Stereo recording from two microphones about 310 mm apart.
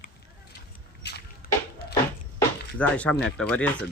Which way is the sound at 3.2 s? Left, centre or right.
Centre.